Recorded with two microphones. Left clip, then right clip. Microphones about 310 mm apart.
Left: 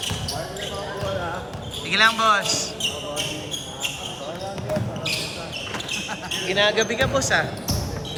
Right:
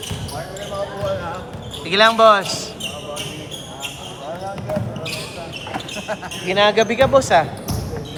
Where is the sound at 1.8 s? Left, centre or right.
Centre.